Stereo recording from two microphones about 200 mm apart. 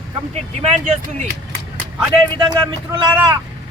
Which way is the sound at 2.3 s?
25° right (ahead or behind).